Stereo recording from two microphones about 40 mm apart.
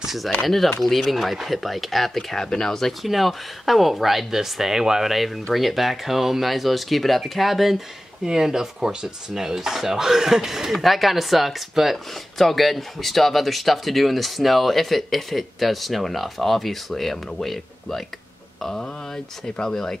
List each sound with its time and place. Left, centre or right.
0.0 s a sound: centre
0.8 s speech: centre
2.3 s speech: centre
3.0 s speech: centre